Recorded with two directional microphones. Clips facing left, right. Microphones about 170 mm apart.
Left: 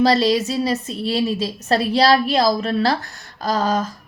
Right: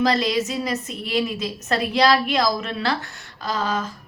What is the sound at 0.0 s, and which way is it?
Speech, 30° left (ahead or behind).